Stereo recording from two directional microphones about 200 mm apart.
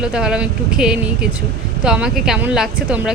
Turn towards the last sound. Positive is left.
turn(degrees=-5)  # may be behind; listen again after turning